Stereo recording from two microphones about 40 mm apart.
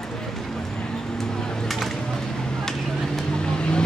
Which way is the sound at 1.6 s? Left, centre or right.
Centre.